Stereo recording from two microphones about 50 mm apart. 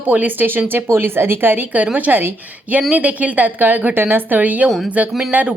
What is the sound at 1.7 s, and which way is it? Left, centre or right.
Speech, right.